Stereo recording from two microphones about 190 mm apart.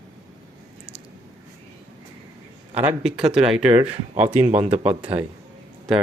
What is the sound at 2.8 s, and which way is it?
Speech, 5° right (ahead or behind).